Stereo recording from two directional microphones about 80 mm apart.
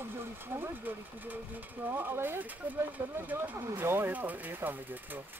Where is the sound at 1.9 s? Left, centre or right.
Right.